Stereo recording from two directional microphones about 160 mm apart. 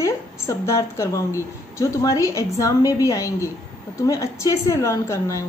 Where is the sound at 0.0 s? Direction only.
20° left (ahead or behind).